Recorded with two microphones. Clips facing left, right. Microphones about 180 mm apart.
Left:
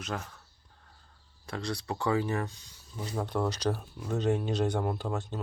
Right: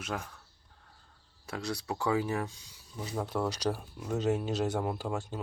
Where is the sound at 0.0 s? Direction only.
5° right (ahead or behind).